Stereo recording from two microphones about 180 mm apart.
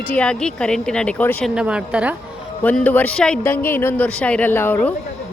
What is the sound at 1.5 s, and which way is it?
Speech, 5° right (ahead or behind).